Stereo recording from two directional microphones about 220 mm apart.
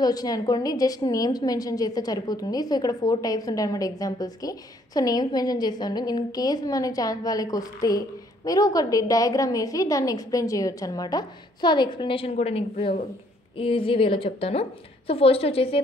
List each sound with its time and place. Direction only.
0.0 s a woman's voice: 15° left (ahead or behind)